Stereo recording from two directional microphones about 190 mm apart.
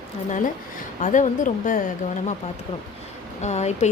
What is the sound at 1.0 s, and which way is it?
Speech, 40° left (ahead or behind).